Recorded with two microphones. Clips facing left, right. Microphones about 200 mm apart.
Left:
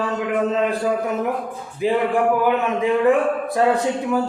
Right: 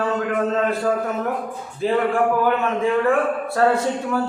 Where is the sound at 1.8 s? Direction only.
15° left (ahead or behind).